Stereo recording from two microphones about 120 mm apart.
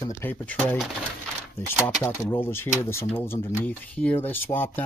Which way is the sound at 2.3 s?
20° left (ahead or behind).